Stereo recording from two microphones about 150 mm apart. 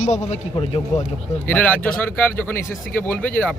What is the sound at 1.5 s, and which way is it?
A man's voice, 10° left (ahead or behind).